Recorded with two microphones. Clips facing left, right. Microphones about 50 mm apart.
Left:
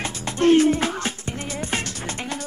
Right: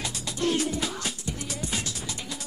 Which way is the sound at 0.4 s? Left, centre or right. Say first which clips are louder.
Left 11 dB; left.